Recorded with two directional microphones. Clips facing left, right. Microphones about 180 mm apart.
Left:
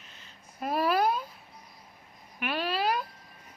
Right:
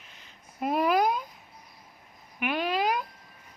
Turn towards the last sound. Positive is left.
turn(degrees=-15)  # may be behind; listen again after turning